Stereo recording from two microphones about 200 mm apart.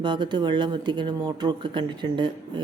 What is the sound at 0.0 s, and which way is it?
Speech, 25° right (ahead or behind).